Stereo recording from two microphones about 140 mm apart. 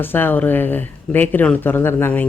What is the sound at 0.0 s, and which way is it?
A woman's voice, 15° left (ahead or behind).